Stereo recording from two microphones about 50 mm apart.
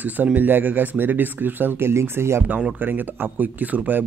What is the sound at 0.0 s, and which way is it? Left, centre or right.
Speech, right.